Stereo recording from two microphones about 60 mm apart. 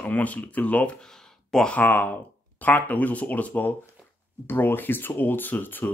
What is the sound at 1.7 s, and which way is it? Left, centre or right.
Speech, left.